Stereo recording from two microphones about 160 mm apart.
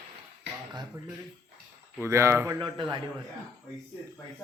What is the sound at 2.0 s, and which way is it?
Speech, 15° right (ahead or behind).